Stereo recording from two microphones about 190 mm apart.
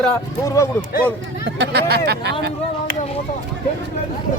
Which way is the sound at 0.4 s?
15° left (ahead or behind).